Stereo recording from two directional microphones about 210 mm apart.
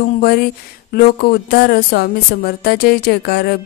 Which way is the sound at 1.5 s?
45° left (ahead or behind).